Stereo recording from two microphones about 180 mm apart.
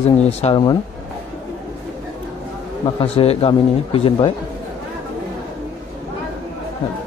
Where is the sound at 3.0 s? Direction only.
35° left (ahead or behind).